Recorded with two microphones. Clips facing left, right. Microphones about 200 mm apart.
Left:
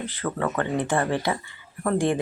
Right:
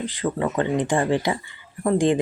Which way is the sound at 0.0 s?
15° right (ahead or behind).